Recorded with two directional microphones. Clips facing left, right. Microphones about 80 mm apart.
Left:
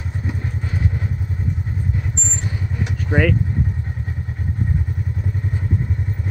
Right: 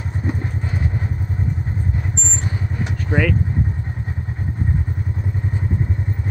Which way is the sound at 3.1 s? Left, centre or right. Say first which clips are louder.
Left 1 dB; centre.